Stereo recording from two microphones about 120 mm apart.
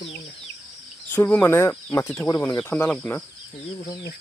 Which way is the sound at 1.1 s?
15° left (ahead or behind).